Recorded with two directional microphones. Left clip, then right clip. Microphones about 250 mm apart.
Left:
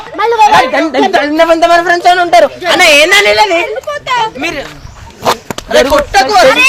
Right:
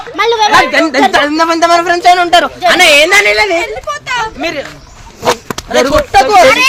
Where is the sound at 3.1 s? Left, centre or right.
Centre.